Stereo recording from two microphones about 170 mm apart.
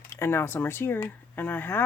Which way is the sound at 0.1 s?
15° left (ahead or behind).